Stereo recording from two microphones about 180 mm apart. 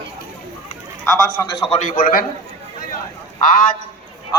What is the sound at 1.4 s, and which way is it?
Speech, 15° left (ahead or behind).